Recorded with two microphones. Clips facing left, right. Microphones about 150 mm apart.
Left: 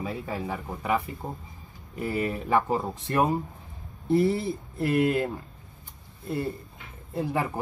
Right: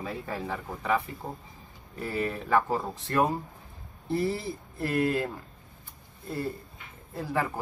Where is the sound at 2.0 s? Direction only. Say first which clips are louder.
Left 3 dB; 15° left (ahead or behind).